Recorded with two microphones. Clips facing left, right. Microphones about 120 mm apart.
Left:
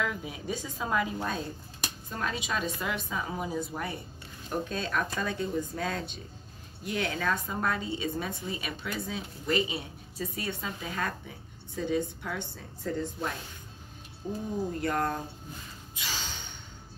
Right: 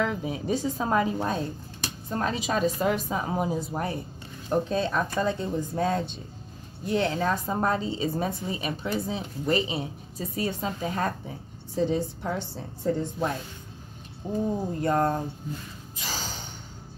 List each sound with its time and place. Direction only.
0.0 s a woman's voice: 35° right (ahead or behind)
4.5 s a woman's voice: 25° right (ahead or behind)
16.0 s gasp: 40° right (ahead or behind)